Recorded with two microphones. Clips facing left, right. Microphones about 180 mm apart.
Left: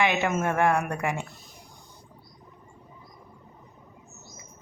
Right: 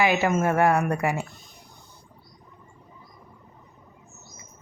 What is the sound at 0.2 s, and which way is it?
A woman's voice, 5° right (ahead or behind).